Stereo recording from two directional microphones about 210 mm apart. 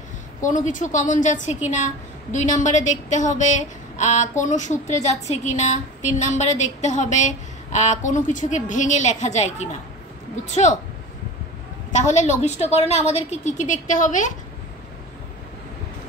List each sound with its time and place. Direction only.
0.4 s speech: 35° left (ahead or behind)
11.9 s speech: 35° left (ahead or behind)